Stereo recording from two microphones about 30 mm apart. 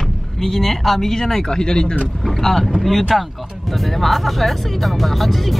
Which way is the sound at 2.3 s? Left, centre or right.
Centre.